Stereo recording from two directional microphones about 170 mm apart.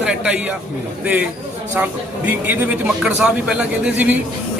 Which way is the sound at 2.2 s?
10° right (ahead or behind).